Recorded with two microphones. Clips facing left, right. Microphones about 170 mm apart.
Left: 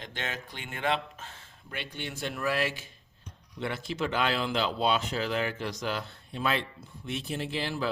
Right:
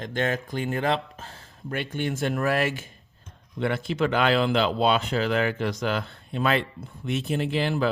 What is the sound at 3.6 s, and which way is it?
A man's voice, 60° right (ahead or behind).